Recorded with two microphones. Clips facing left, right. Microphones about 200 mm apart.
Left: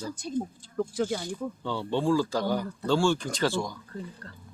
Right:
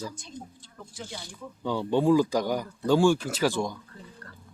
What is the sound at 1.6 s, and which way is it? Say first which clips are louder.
Speech: right 5 dB; 15° right (ahead or behind).